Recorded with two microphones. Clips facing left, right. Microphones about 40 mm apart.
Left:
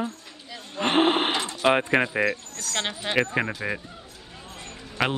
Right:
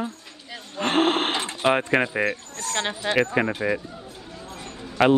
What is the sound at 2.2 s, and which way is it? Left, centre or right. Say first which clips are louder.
Speech: even; right.